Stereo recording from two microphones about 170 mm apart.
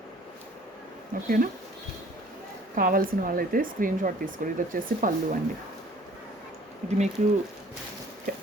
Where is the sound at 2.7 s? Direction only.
55° right (ahead or behind).